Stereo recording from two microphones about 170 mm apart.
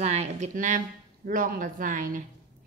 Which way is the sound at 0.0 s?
40° right (ahead or behind).